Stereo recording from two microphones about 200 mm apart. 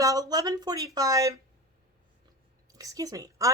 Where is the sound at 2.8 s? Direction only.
15° right (ahead or behind).